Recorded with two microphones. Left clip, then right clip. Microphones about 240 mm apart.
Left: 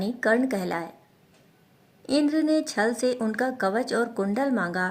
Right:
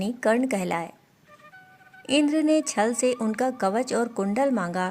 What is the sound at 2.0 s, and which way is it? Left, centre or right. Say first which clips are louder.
Speech: right 1 dB; right.